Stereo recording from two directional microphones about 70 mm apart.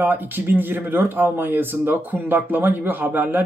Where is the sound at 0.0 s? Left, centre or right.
Right.